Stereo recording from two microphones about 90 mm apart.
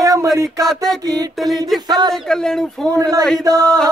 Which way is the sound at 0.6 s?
5° left (ahead or behind).